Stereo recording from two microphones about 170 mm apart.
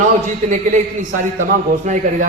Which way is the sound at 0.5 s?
50° right (ahead or behind).